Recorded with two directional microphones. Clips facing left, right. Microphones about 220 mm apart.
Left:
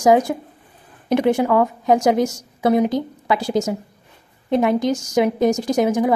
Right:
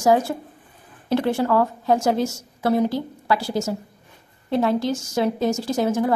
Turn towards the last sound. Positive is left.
turn(degrees=15)  # may be behind; listen again after turning